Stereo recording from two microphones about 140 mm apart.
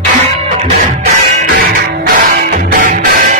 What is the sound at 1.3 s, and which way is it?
Music, 80° right.